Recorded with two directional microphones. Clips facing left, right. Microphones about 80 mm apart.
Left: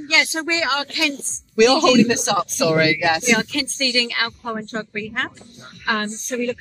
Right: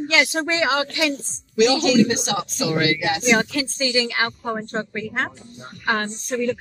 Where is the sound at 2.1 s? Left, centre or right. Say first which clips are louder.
Left 4 dB; left.